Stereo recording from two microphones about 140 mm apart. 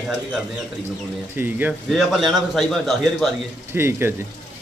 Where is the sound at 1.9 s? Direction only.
Centre (ahead or behind).